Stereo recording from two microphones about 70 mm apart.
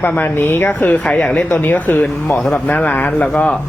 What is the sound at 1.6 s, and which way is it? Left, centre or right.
Speech, left.